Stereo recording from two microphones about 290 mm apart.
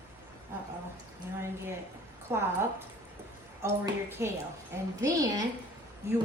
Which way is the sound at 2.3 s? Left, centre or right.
Centre.